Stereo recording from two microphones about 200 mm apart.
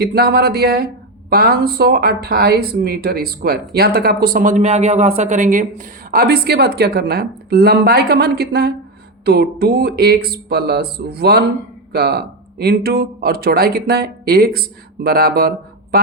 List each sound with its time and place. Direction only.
0.0 s speech: 50° right (ahead or behind)